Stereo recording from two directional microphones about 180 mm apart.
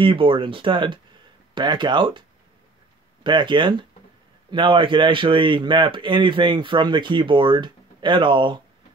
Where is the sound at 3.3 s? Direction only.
25° right (ahead or behind).